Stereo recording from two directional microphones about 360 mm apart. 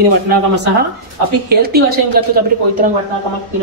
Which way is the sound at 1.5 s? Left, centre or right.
Right.